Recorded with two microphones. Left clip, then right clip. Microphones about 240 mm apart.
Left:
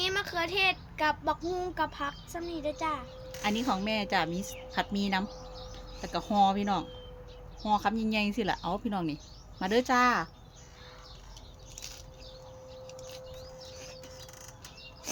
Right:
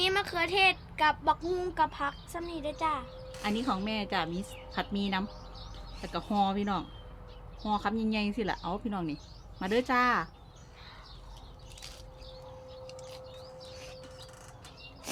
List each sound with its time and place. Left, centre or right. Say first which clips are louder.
0.0 s speech: right 2 dB; right
3.4 s speech: left 2 dB; left
15.1 s bird: left 1 dB; right